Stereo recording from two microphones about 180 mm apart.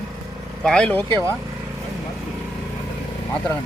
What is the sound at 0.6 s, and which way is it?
Speech, 5° left (ahead or behind).